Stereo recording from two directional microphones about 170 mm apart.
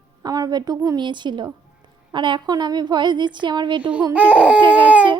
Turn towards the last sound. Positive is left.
turn(degrees=-10)  # may be behind; listen again after turning